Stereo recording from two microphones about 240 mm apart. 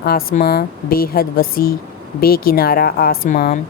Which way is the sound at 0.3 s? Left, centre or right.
Left.